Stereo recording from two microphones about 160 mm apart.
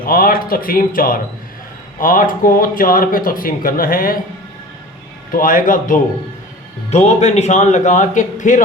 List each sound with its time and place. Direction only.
0.0 s speech: 65° left (ahead or behind)
5.3 s speech: 60° left (ahead or behind)
6.9 s a man's voice: 45° left (ahead or behind)